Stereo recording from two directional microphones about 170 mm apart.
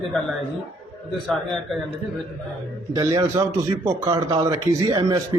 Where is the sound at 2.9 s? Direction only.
20° right (ahead or behind).